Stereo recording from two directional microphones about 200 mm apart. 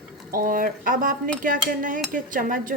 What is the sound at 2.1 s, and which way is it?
Dishes, 40° right (ahead or behind).